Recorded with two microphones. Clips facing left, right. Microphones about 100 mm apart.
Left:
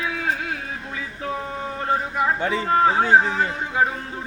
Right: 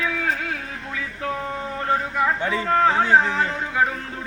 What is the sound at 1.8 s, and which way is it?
A man's voice, 20° left (ahead or behind).